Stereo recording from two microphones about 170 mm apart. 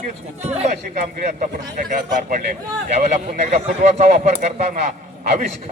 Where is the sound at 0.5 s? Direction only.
40° right (ahead or behind).